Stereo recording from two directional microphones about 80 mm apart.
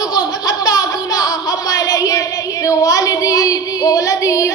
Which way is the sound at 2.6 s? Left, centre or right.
Left.